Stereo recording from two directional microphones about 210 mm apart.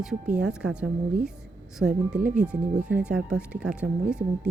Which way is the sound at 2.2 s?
40° right (ahead or behind).